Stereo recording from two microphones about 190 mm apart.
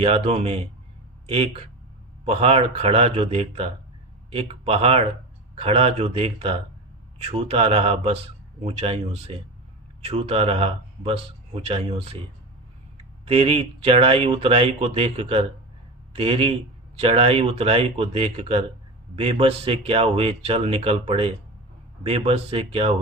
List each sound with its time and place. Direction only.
0.0 s speech: 35° right (ahead or behind)
13.2 s speech: 30° right (ahead or behind)